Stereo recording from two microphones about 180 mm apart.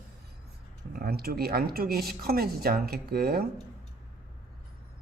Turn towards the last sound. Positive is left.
turn(degrees=-60)  # may be behind; listen again after turning